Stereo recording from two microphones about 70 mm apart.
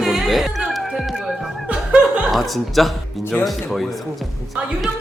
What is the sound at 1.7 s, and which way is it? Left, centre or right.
Chuckle, right.